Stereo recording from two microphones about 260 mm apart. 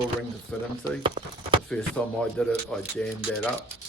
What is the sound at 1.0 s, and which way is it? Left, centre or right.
Speech, centre.